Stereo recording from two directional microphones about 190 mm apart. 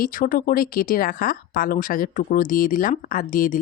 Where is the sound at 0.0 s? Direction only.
45° left (ahead or behind).